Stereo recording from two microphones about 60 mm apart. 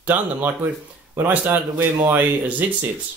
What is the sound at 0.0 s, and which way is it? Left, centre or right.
A man's voice, right.